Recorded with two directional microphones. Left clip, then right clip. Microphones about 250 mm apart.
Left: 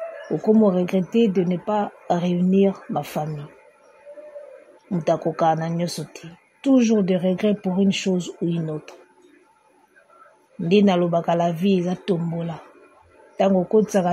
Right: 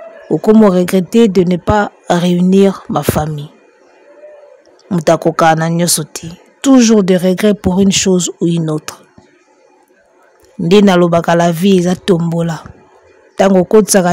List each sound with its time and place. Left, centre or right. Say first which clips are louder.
0.4 s speech: right 9 dB; right
4.8 s speech: right 11 dB; right
10.7 s speech: right 10 dB; right